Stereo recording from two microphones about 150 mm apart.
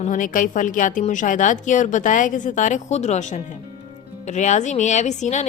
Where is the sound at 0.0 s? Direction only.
60° left (ahead or behind).